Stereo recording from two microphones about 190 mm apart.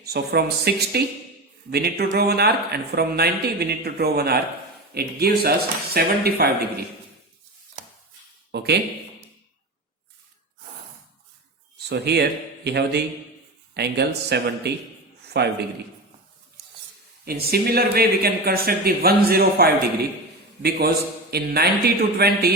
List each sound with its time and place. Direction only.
0.0 s speech: 55° right (ahead or behind)
8.5 s speech: 60° right (ahead or behind)
11.9 s speech: 60° right (ahead or behind)
17.2 s speech: 55° right (ahead or behind)